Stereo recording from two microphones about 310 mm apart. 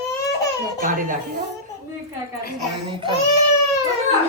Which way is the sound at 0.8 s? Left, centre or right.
Right.